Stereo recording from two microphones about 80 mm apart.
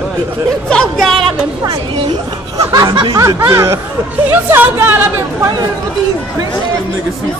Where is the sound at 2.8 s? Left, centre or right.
Right.